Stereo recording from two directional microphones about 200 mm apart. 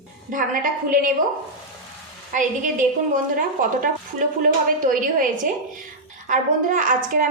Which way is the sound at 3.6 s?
40° right (ahead or behind).